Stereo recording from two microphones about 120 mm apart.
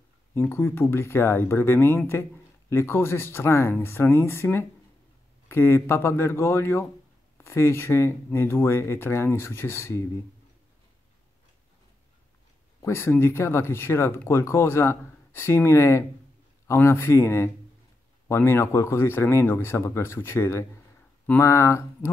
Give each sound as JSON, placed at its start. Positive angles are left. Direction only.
{"t": 0.3, "sound": "speech", "side_deg": 20}
{"t": 12.8, "sound": "speech", "side_deg": 20}